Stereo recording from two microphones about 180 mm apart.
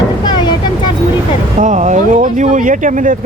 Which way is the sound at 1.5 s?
40° right (ahead or behind).